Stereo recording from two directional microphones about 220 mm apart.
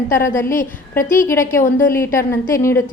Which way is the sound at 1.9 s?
10° left (ahead or behind).